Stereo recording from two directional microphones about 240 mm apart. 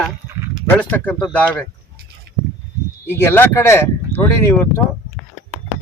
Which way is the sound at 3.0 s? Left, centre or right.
Centre.